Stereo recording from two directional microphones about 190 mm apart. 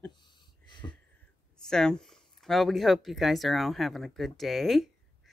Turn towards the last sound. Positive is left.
turn(degrees=0)  # may be behind; listen again after turning